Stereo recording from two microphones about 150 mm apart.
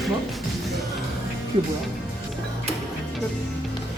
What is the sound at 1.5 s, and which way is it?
Speech, 35° right (ahead or behind).